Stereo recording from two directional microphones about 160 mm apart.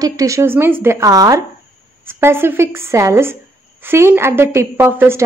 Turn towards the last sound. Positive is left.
turn(degrees=-15)  # may be behind; listen again after turning